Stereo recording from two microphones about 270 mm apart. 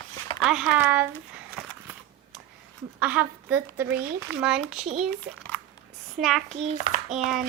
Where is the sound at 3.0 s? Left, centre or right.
Centre.